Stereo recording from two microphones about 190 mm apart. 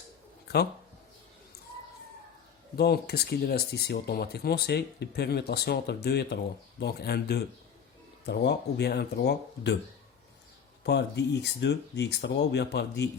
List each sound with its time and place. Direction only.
0.4 s a sound: 60° left (ahead or behind)
2.7 s speech: 55° left (ahead or behind)
10.8 s speech: 60° left (ahead or behind)